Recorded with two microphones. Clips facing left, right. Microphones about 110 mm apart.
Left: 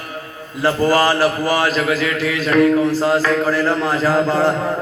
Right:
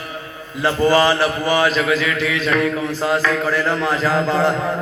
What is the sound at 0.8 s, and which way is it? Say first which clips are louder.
Speech: right 1 dB; 40° left (ahead or behind).